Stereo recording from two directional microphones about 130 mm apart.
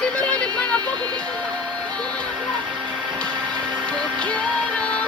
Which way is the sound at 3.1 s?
10° left (ahead or behind).